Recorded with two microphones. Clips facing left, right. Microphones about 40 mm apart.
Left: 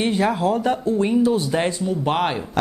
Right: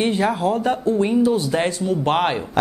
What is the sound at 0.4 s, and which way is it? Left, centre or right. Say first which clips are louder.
Speech: even; right.